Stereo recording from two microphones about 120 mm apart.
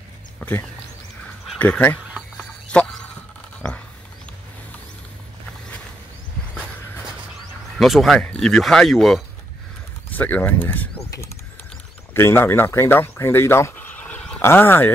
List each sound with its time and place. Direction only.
0.4 s speech: 15° left (ahead or behind)
2.7 s a sound: 10° left (ahead or behind)
7.7 s speech: centre (ahead or behind)
10.1 s speech: 15° left (ahead or behind)
12.1 s speech: 20° left (ahead or behind)